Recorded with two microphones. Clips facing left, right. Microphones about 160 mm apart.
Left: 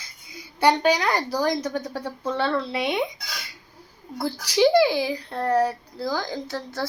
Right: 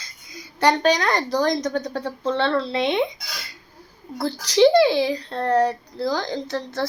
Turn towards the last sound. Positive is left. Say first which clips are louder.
# right 4 dB
turn(degrees=5)  # may be behind; listen again after turning